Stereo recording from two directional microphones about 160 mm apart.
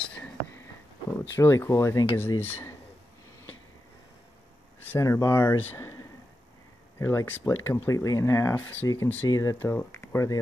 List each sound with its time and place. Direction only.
1.3 s speech: 15° left (ahead or behind)
4.8 s speech: 15° left (ahead or behind)
7.0 s speech: 20° left (ahead or behind)